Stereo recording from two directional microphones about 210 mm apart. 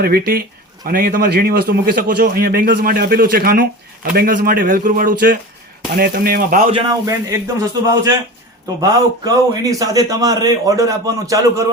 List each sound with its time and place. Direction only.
0.0 s a man's voice: 45° right (ahead or behind)
6.7 s a man's voice: 20° right (ahead or behind)
8.8 s a man's voice: 15° right (ahead or behind)